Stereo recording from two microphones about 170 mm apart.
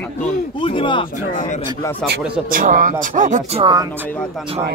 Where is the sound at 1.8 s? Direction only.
10° left (ahead or behind).